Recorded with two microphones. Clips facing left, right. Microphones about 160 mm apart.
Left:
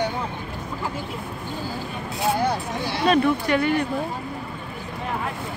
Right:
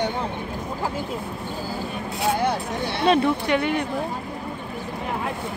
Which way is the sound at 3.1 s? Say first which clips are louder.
Even; 20° right (ahead or behind).